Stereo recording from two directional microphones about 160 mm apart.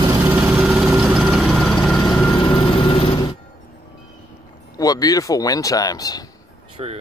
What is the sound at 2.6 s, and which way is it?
Vehicle, 30° left (ahead or behind).